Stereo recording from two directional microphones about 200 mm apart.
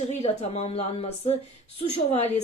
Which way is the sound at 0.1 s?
35° left (ahead or behind).